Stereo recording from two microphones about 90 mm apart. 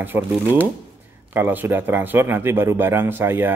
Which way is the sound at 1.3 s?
20° right (ahead or behind).